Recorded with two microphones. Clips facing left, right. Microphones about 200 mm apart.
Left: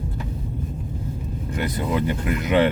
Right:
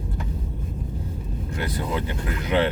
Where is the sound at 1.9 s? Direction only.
15° left (ahead or behind).